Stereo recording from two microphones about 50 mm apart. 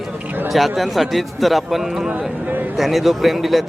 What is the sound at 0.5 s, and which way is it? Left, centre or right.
Speech, centre.